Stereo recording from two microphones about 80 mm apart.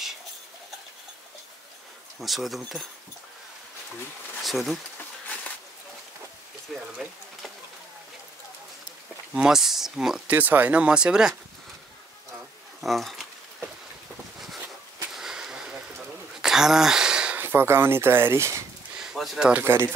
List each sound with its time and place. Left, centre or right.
2.1 s speech: centre
4.4 s speech: centre
6.7 s speech: centre
9.3 s speech: centre
10.2 s speech: right
12.8 s speech: centre
15.1 s a sound: centre
17.4 s speech: right
18.9 s a sound: centre
19.5 s speech: right